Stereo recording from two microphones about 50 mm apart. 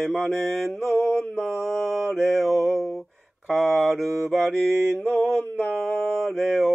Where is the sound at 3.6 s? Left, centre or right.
Centre.